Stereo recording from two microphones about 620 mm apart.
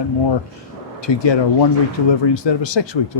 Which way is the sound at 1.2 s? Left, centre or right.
Left.